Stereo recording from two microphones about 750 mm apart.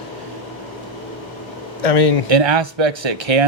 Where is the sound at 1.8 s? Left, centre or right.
Left.